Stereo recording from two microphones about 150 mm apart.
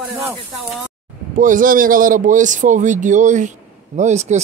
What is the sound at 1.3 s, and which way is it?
A man's voice, 65° right (ahead or behind).